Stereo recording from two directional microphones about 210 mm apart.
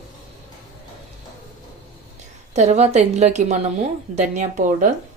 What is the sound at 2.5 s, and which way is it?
Speech, 30° right (ahead or behind).